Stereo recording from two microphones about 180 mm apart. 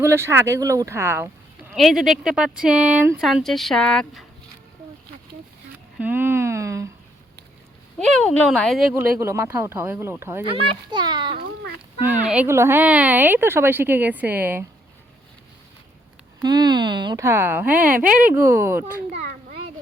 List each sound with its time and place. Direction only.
0.0 s speech: 15° right (ahead or behind)
1.7 s speech: centre (ahead or behind)
6.0 s a sound: 10° right (ahead or behind)
7.9 s speech: 5° left (ahead or behind)
9.0 s speech: 15° right (ahead or behind)
10.5 s a child's voice: 25° right (ahead or behind)
12.3 s speech: 10° right (ahead or behind)
16.4 s speech: 20° right (ahead or behind)